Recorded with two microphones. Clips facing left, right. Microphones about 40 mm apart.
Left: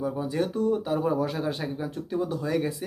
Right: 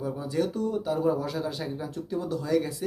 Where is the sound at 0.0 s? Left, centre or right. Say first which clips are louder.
Left 1 dB; left.